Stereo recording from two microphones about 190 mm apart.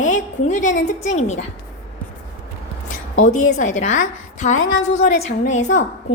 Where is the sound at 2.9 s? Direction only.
40° left (ahead or behind).